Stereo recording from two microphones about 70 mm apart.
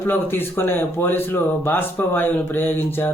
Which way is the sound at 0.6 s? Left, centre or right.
Left.